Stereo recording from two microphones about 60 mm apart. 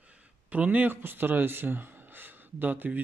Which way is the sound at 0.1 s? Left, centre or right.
Right.